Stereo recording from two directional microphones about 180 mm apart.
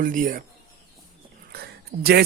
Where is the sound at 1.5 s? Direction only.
60° right (ahead or behind).